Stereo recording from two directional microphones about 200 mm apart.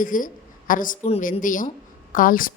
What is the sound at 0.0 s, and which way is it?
Speech, 40° left (ahead or behind).